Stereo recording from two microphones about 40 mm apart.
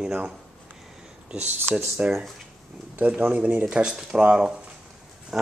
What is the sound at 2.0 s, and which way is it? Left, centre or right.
Speech, right.